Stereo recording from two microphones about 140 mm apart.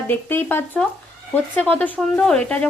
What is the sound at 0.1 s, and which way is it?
A woman's voice, 15° left (ahead or behind).